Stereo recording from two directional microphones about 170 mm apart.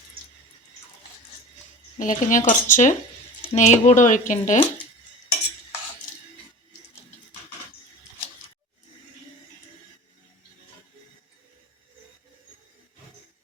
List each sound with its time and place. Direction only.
2.0 s speech: 50° left (ahead or behind)